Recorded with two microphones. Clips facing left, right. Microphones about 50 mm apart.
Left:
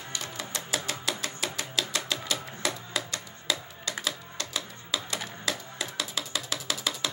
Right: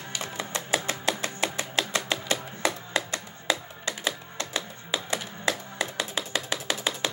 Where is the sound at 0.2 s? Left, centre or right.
Right.